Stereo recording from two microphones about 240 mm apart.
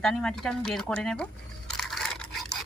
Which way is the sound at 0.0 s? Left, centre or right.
Centre.